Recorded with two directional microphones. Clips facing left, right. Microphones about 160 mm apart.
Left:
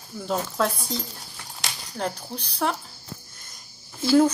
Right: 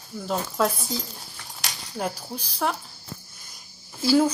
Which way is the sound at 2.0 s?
5° right (ahead or behind).